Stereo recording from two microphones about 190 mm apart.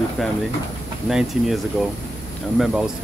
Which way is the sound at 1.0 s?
Centre (ahead or behind).